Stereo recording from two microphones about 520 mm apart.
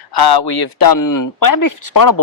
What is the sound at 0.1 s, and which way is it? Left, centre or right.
Speech, left.